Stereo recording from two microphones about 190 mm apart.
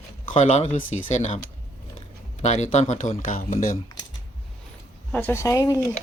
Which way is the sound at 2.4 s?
35° left (ahead or behind).